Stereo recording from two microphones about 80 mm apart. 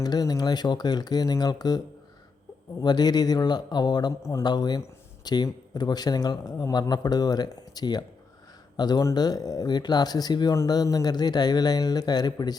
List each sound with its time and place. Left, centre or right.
0.0 s speech: left
2.8 s speech: left
6.6 s speech: left